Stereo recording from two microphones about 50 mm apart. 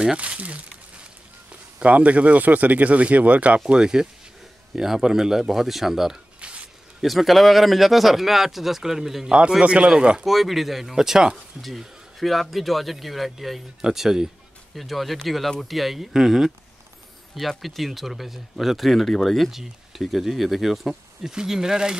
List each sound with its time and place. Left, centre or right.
0.2 s speech: right; by 6.1 s centre
6.4 s zipper: right
7.0 s speech: centre
9.6 s speech: right
10.2 s speech: centre